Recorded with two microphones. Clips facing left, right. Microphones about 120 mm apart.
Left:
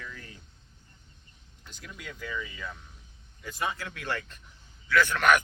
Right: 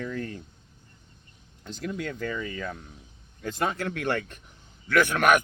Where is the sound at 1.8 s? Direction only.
50° right (ahead or behind).